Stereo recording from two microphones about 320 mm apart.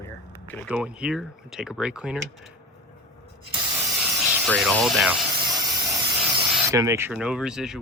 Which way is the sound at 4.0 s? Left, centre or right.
Centre.